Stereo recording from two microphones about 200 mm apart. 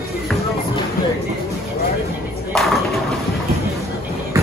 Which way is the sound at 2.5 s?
Centre (ahead or behind).